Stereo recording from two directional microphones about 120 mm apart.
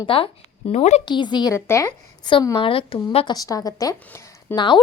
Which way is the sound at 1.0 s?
40° left (ahead or behind).